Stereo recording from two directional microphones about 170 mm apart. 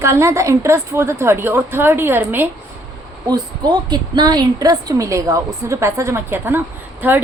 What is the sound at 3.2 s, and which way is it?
A woman's voice, 25° right (ahead or behind).